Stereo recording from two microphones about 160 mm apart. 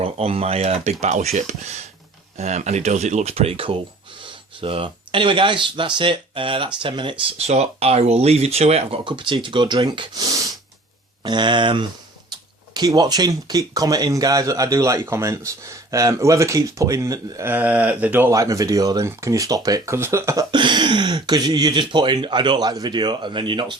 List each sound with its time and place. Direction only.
0.0 s speech: 40° right (ahead or behind)